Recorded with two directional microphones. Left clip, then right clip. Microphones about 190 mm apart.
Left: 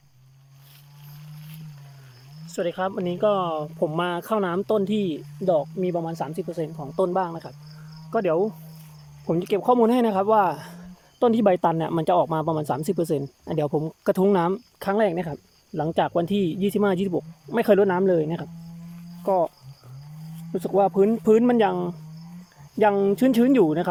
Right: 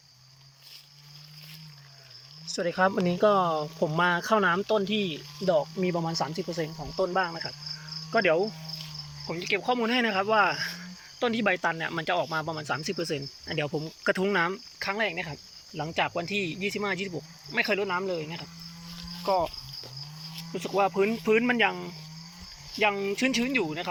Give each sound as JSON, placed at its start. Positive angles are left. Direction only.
{"t": 2.5, "sound": "speech", "side_deg": 5}
{"t": 9.2, "sound": "speech", "side_deg": 40}
{"t": 19.2, "sound": "speech", "side_deg": 25}